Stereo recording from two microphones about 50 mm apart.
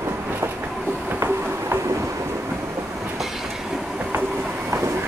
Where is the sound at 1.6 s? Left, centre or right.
Right.